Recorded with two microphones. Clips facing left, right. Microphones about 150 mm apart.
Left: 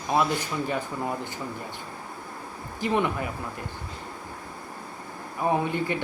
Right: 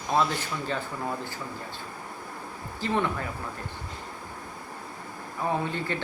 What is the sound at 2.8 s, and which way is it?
Speech, 15° left (ahead or behind).